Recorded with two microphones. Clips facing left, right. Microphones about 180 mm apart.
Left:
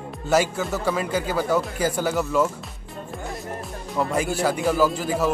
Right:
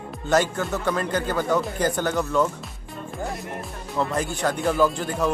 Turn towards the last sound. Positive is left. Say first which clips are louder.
# left 1 dB
turn(degrees=5)  # may be behind; listen again after turning